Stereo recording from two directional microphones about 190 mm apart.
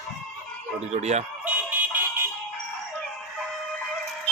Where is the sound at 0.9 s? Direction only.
35° right (ahead or behind).